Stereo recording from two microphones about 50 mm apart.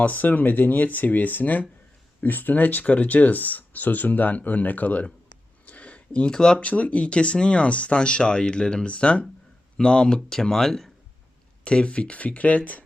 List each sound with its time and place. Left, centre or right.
0.0 s speech: left
5.6 s a sound: left
6.3 s speech: centre
6.6 s speech: left; by 10.9 s centre
11.6 s speech: left